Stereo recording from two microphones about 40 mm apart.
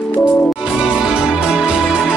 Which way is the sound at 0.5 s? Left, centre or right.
Right.